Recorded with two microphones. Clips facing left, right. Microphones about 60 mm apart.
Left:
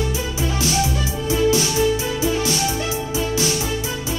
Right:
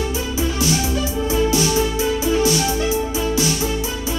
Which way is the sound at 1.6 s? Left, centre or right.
Right.